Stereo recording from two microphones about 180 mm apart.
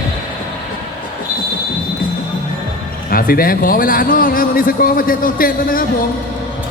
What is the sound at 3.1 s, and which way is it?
A man's voice, 55° left (ahead or behind).